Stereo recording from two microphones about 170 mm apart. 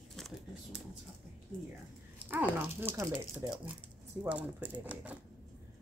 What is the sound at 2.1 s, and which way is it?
Dog, 10° right (ahead or behind).